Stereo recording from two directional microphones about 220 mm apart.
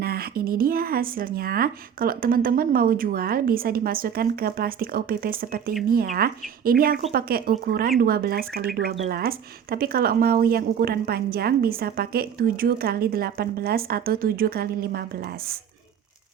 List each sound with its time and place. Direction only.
0.0 s speech: 45° right (ahead or behind)